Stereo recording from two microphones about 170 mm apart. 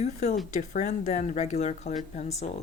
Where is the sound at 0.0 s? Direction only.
45° left (ahead or behind).